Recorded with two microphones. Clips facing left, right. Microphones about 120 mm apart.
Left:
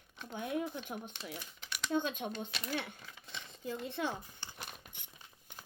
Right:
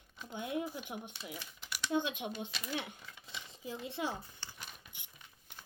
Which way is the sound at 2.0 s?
45° left (ahead or behind).